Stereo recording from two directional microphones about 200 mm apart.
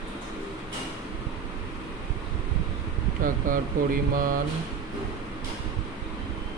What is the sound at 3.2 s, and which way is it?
Speech, 45° right (ahead or behind).